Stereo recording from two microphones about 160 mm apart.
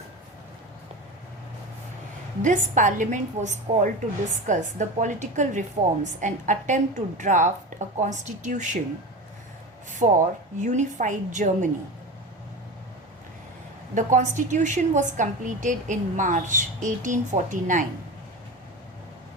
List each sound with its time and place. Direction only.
2.4 s a woman's voice: 50° right (ahead or behind)
10.0 s a woman's voice: 50° right (ahead or behind)
13.9 s a woman's voice: 50° right (ahead or behind)